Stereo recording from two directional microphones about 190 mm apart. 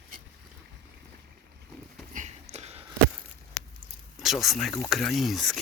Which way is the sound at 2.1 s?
35° right (ahead or behind).